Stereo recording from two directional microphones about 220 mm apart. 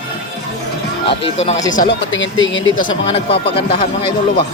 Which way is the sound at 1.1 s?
25° left (ahead or behind).